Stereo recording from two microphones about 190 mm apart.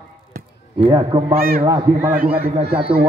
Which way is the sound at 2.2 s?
30° right (ahead or behind).